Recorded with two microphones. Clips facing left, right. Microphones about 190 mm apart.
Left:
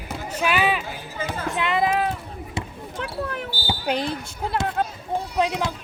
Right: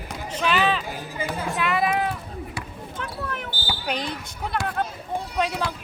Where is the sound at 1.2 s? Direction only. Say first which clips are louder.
Even; 20° left (ahead or behind).